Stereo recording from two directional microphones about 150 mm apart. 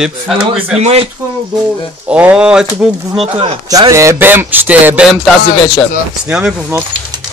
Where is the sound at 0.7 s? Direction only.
45° right (ahead or behind).